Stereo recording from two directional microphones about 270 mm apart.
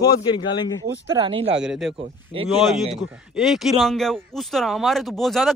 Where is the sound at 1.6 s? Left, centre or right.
Centre.